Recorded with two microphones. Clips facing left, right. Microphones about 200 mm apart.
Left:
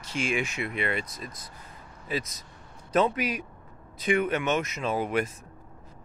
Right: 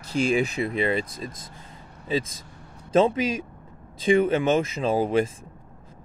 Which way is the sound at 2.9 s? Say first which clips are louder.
Right 5 dB; 25° right (ahead or behind).